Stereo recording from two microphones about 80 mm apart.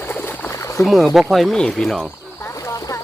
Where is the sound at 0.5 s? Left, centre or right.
Left.